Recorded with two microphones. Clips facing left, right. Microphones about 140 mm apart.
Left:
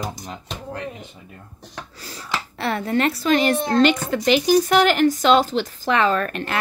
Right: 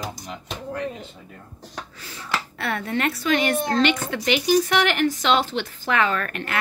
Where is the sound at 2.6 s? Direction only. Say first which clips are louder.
Left 5 dB; 30° left (ahead or behind).